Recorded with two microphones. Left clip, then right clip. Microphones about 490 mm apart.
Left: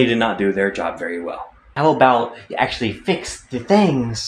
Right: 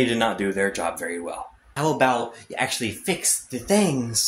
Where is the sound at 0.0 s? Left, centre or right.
Right.